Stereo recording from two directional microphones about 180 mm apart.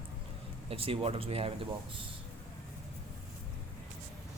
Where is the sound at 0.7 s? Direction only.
30° right (ahead or behind).